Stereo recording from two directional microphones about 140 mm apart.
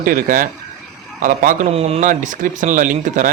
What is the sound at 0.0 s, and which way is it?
Speech, 90° right.